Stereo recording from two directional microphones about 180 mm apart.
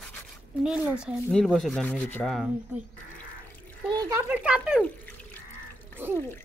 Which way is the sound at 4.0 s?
20° right (ahead or behind).